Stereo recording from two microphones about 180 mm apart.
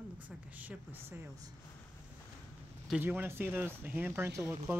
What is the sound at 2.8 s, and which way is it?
Speech, 5° right (ahead or behind).